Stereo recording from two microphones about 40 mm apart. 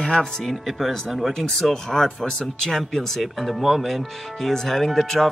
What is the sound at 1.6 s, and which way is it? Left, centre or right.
Speech, centre.